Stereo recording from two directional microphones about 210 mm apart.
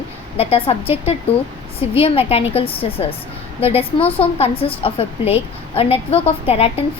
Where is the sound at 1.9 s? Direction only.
25° left (ahead or behind).